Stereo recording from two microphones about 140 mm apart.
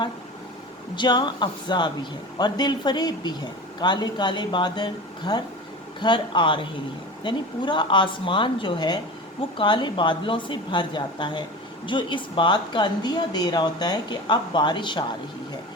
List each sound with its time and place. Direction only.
0.9 s speech: 30° left (ahead or behind)